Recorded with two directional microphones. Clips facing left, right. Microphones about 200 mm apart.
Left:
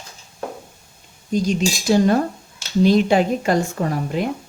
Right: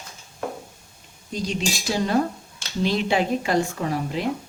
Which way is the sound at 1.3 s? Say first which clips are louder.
Left 7 dB; 45° left (ahead or behind).